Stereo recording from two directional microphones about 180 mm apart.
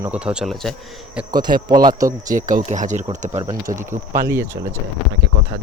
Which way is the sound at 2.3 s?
45° right (ahead or behind).